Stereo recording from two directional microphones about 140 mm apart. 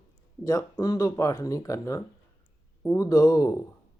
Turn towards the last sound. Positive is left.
turn(degrees=25)  # may be behind; listen again after turning